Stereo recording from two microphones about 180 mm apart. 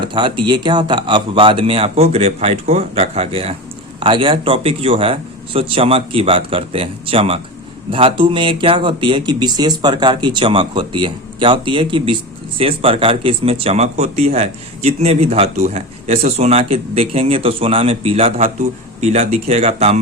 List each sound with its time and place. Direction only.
0.0 s speech: 25° right (ahead or behind)